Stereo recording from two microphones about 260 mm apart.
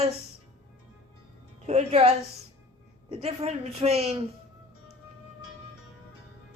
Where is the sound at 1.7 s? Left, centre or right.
Right.